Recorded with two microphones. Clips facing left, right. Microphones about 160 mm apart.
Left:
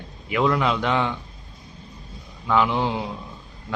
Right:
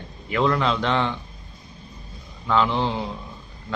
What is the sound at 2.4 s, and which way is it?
Speech, 10° left (ahead or behind).